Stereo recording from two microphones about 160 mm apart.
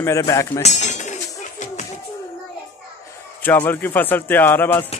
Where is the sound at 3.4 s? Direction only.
10° left (ahead or behind).